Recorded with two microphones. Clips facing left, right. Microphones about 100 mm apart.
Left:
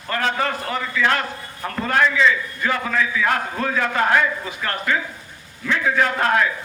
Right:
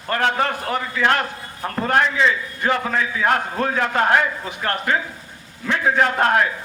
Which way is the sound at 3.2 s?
50° right (ahead or behind).